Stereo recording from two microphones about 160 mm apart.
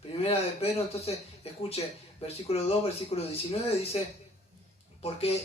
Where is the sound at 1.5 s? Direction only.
40° left (ahead or behind).